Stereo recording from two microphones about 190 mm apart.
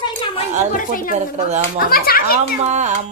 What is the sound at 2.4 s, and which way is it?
Speech, 40° right (ahead or behind).